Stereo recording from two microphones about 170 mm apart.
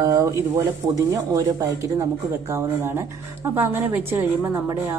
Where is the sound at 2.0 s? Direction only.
15° right (ahead or behind).